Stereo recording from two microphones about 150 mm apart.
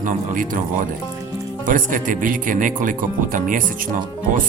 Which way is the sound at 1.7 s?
60° right (ahead or behind).